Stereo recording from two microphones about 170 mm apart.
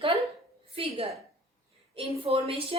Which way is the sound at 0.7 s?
30° right (ahead or behind).